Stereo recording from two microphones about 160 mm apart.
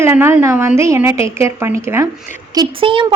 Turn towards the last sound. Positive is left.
turn(degrees=-35)  # may be behind; listen again after turning